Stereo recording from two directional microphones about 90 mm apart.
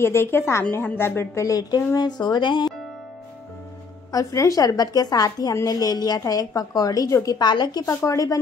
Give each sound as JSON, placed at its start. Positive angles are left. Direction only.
{"t": 0.0, "sound": "a woman's voice", "side_deg": 25}
{"t": 4.1, "sound": "a woman's voice", "side_deg": 40}
{"t": 7.3, "sound": "a woman's voice", "side_deg": 55}
{"t": 7.8, "sound": "a woman's voice", "side_deg": 35}